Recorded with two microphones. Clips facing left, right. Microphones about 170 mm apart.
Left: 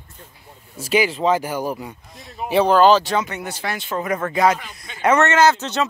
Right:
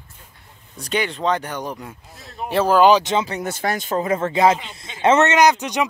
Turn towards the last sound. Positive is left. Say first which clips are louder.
# even
turn(degrees=-15)  # may be behind; listen again after turning